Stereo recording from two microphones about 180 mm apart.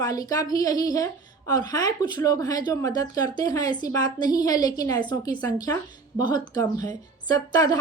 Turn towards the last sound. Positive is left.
turn(degrees=20)  # may be behind; listen again after turning